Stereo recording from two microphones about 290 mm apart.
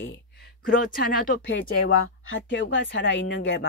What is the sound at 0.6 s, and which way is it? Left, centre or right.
Speech, left.